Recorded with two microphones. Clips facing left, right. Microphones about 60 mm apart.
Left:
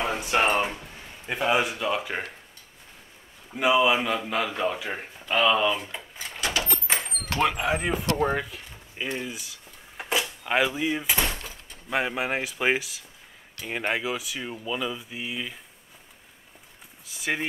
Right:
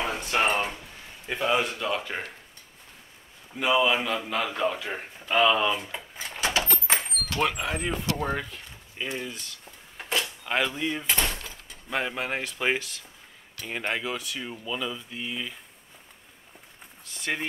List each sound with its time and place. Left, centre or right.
0.0 s a sound: centre
0.7 s speech: centre
3.5 s speech: centre
5.2 s speech: centre
6.3 s vehicle: right
7.3 s speech: centre
8.2 s a sound: centre
13.6 s speech: centre
17.0 s speech: centre